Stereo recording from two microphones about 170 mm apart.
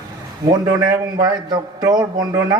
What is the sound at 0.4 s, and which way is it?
A man's voice, 20° right (ahead or behind).